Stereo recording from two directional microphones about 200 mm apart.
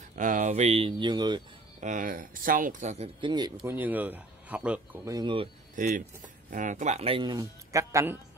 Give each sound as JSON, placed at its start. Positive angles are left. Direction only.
{"t": 0.1, "sound": "speech", "side_deg": -40}
{"t": 1.8, "sound": "speech", "side_deg": -40}
{"t": 3.5, "sound": "speech", "side_deg": -10}
{"t": 5.1, "sound": "speech", "side_deg": -25}
{"t": 5.8, "sound": "speech", "side_deg": -40}